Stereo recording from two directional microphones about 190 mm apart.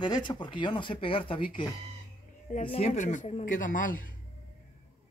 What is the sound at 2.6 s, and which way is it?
Speech, 30° left (ahead or behind).